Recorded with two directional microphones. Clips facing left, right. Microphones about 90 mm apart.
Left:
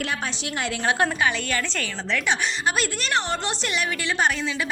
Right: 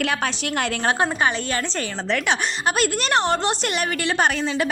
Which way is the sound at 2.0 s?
60° right (ahead or behind).